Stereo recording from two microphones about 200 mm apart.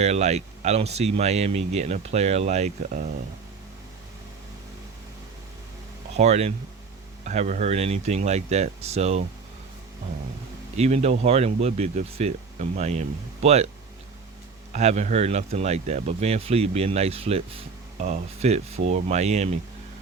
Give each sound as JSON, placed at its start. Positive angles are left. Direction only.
{"t": 0.0, "sound": "speech", "side_deg": -35}
{"t": 6.1, "sound": "speech", "side_deg": -35}
{"t": 10.8, "sound": "speech", "side_deg": -35}
{"t": 14.7, "sound": "speech", "side_deg": -35}